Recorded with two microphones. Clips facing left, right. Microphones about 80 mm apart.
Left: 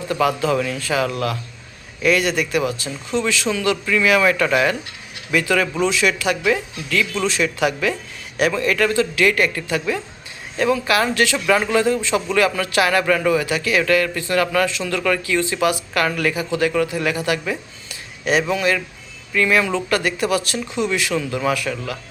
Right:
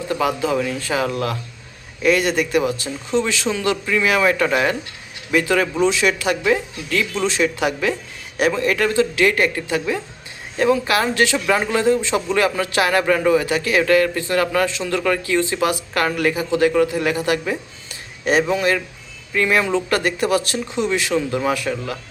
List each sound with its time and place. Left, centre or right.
0.1 s a man's voice: centre
0.8 s a man's voice: right